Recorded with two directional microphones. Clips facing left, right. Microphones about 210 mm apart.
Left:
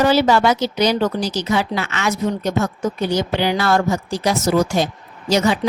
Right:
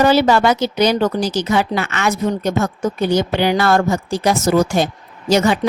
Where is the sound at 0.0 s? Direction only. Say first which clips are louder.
Right 2 dB; 55° right (ahead or behind).